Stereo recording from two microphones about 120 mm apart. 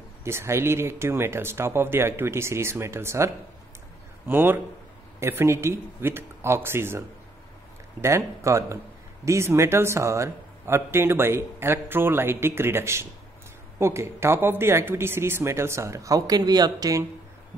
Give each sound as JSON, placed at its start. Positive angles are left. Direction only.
{"t": 0.2, "sound": "a man's voice", "side_deg": -20}
{"t": 4.3, "sound": "a man's voice", "side_deg": -15}